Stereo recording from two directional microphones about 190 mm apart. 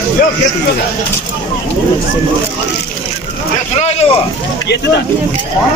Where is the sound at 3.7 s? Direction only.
35° left (ahead or behind).